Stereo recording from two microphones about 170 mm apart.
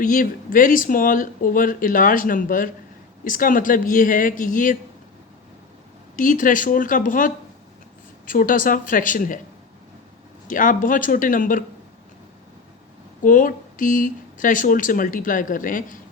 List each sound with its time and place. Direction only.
0.0 s speech: 55° left (ahead or behind)
6.1 s speech: 50° left (ahead or behind)
10.4 s speech: 50° left (ahead or behind)
13.2 s speech: 50° left (ahead or behind)